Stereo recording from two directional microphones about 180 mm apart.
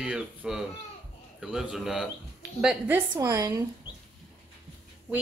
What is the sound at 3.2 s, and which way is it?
Speech, 15° right (ahead or behind).